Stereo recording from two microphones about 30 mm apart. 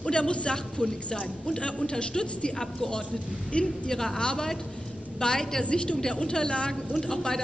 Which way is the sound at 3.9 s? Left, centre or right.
Centre.